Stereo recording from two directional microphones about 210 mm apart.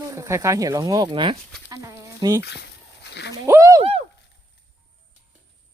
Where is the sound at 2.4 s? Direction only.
55° left (ahead or behind).